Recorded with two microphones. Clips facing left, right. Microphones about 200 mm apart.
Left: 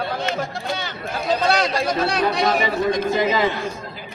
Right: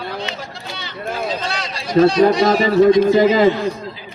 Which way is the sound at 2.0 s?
60° left (ahead or behind).